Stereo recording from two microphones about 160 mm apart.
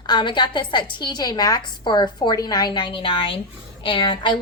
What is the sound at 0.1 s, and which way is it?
A woman's voice, 30° left (ahead or behind).